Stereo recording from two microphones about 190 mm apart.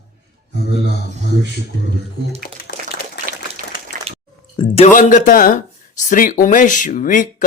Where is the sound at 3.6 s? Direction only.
50° right (ahead or behind).